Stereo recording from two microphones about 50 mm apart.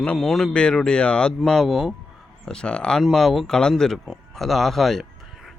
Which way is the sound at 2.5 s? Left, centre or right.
Centre.